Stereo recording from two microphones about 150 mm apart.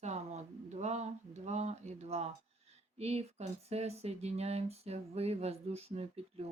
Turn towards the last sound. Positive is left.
turn(degrees=-40)  # may be behind; listen again after turning